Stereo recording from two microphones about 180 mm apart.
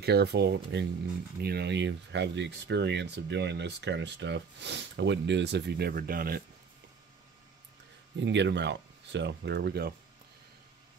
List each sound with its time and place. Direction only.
0.0 s speech: 65° right (ahead or behind)
8.2 s speech: 80° right; by 9.9 s 65° right (ahead or behind)